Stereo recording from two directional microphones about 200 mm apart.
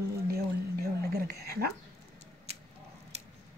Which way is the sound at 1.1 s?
50° right (ahead or behind).